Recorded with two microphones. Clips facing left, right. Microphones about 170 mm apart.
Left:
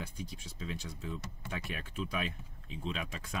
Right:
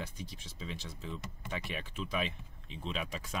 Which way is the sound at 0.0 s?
Centre (ahead or behind).